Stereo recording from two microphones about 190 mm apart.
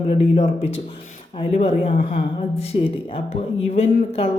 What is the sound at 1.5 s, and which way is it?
Speech, 35° left (ahead or behind).